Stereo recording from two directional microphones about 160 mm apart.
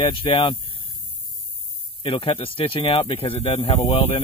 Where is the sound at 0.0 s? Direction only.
30° left (ahead or behind).